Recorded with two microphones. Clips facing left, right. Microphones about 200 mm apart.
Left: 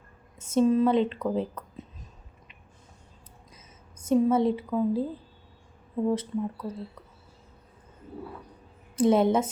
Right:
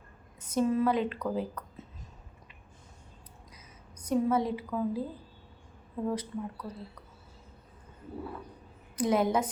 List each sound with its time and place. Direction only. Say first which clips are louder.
0.3 s speech: left 5 dB; 25° left (ahead or behind)
3.5 s a woman's voice: even; 25° left (ahead or behind)
6.1 s a woman's voice: left 6 dB; 25° left (ahead or behind)
9.0 s a woman's voice: left 5 dB; 25° left (ahead or behind)